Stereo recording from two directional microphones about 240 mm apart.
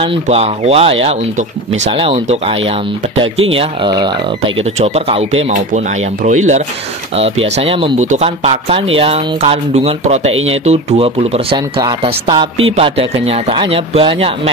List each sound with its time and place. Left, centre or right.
0.0 s speech: right